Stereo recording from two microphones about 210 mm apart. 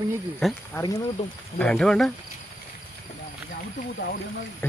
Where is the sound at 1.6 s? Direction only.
5° left (ahead or behind).